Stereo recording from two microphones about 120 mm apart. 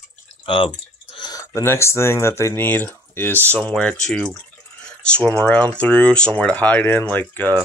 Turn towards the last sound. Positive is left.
turn(degrees=15)  # may be behind; listen again after turning